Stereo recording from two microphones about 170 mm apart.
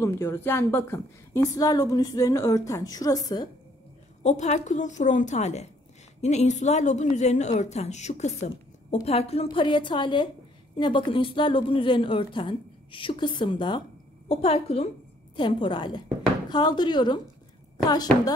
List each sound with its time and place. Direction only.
0.0 s a woman's voice: 15° left (ahead or behind)
4.2 s a woman's voice: 45° left (ahead or behind); by 17.2 s 25° left (ahead or behind)